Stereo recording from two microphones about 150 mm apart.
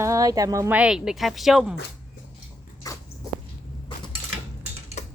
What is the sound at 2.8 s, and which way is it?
Dog, 25° left (ahead or behind).